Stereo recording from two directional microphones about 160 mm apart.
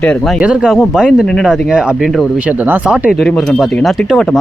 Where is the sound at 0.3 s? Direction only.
5° right (ahead or behind).